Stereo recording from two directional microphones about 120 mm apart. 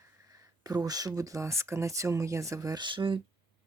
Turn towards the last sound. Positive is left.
turn(degrees=-45)  # may be behind; listen again after turning